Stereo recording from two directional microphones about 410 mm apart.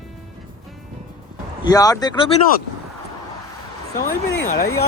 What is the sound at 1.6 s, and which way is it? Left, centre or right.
Speech, centre.